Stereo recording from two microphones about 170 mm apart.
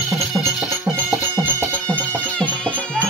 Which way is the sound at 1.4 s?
10° right (ahead or behind).